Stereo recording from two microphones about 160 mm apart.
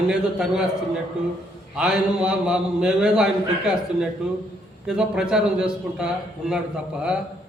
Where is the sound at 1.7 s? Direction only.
5° right (ahead or behind).